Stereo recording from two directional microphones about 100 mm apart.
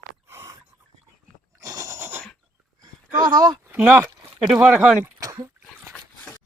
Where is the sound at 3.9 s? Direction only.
35° right (ahead or behind).